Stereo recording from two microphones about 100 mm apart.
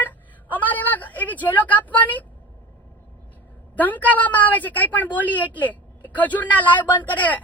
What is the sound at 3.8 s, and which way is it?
A woman's voice, 15° left (ahead or behind).